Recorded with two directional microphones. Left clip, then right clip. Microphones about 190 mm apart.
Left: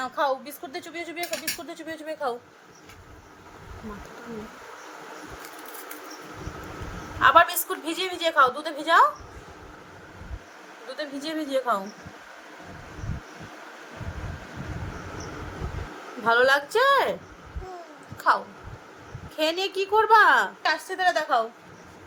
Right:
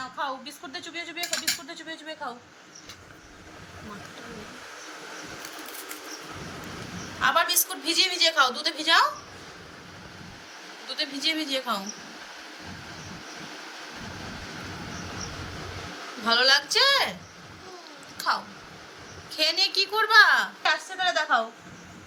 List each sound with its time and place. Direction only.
0.0 s speech: 70° left (ahead or behind)
7.2 s a woman's voice: 45° left (ahead or behind)
10.8 s a woman's voice: 35° left (ahead or behind)
16.2 s a woman's voice: 45° left (ahead or behind)
18.2 s a sound: 55° left (ahead or behind)
19.4 s a woman's voice: 55° left (ahead or behind); by 21.4 s 70° left (ahead or behind)